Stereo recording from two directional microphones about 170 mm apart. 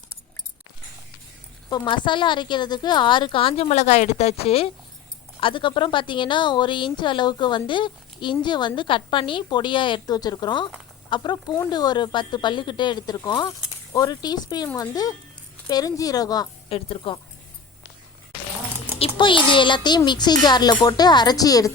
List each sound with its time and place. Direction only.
1.7 s a woman's voice: 30° left (ahead or behind)
16.6 s a woman's voice: 35° left (ahead or behind)
18.9 s a woman's voice: 30° left (ahead or behind)